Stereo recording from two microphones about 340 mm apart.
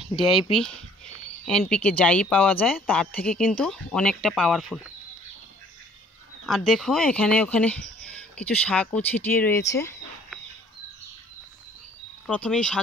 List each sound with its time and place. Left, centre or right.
0.1 s speech: centre
6.4 s speech: centre
9.7 s a sound: centre
12.3 s speech: centre